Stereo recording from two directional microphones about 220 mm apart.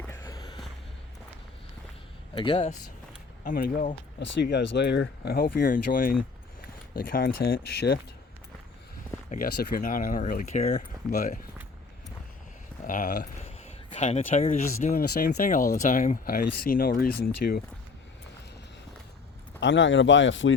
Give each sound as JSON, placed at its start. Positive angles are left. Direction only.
{"t": 0.0, "sound": "a sound", "side_deg": 15}
{"t": 2.3, "sound": "speech", "side_deg": 25}
{"t": 4.2, "sound": "speech", "side_deg": 50}
{"t": 9.3, "sound": "speech", "side_deg": 40}
{"t": 12.8, "sound": "speech", "side_deg": 35}
{"t": 19.5, "sound": "speech", "side_deg": 55}